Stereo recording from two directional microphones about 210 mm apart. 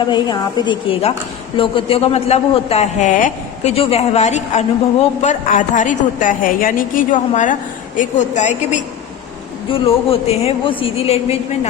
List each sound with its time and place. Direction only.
0.0 s a woman's voice: 20° left (ahead or behind)